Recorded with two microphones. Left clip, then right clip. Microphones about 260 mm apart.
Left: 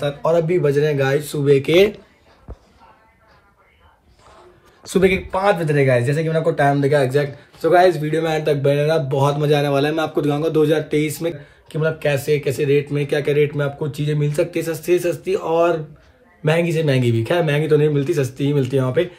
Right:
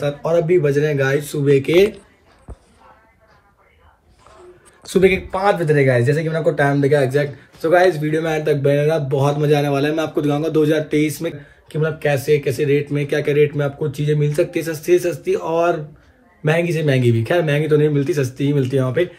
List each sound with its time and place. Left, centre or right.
0.0 s a man's voice: centre
1.7 s speech: left
4.8 s a man's voice: left
5.1 s a man's voice: centre